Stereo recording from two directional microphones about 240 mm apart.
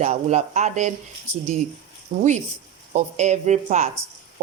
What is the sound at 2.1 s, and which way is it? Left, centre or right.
Speech, right.